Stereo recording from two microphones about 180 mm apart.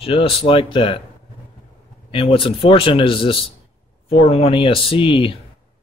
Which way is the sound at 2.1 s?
30° left (ahead or behind).